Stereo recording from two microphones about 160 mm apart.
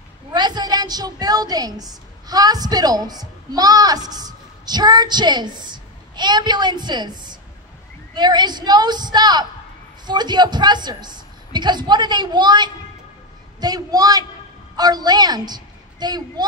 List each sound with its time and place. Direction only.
0.3 s a woman's voice: 25° right (ahead or behind)